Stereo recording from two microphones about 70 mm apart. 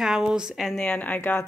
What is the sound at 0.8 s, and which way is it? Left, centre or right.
Speech, centre.